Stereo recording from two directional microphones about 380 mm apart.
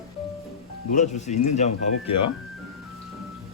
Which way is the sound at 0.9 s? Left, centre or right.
Centre.